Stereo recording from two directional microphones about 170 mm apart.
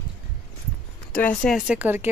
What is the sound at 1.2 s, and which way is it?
Speech, 5° left (ahead or behind).